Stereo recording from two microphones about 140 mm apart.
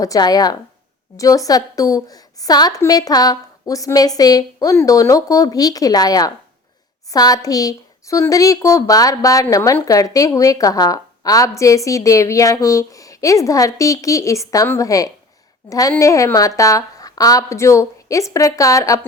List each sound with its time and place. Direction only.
0.0 s speech: 25° left (ahead or behind)